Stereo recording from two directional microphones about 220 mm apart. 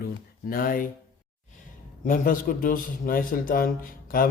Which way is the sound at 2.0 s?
40° left (ahead or behind).